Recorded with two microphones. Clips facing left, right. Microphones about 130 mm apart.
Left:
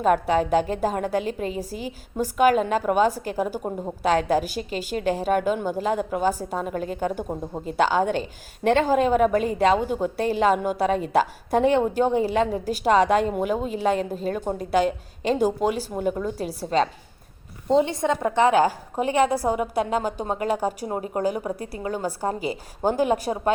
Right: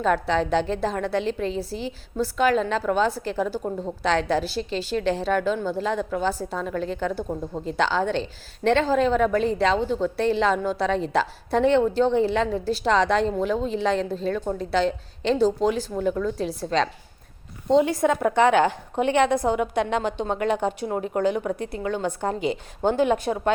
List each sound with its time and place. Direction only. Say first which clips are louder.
0.0 s a woman's voice: left 2 dB; 10° left (ahead or behind)
18.3 s a woman's voice: left 1 dB; centre (ahead or behind)
19.8 s a woman's voice: even; 40° left (ahead or behind)
20.1 s a woman's voice: right 1 dB; 10° left (ahead or behind)
21.2 s a woman's voice: right 2 dB; 35° left (ahead or behind)
22.4 s a woman's voice: right 2 dB; 5° left (ahead or behind)
22.9 s a woman's voice: right 1 dB; 40° left (ahead or behind)